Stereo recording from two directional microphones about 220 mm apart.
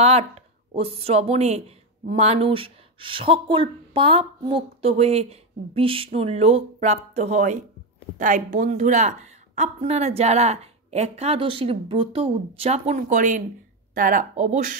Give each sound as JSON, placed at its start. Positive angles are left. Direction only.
{"t": 0.0, "sound": "a woman's voice", "side_deg": -30}